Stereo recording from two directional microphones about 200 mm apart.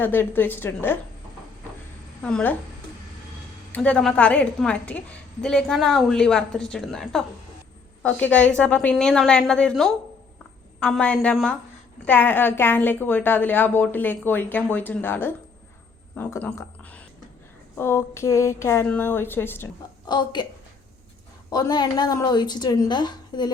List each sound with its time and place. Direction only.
0.0 s a woman's voice: 10° left (ahead or behind)
2.2 s a woman's voice: 5° left (ahead or behind)
3.7 s a woman's voice: 5° left (ahead or behind)
20.1 s a woman's voice: 20° left (ahead or behind)
21.5 s a woman's voice: 20° left (ahead or behind)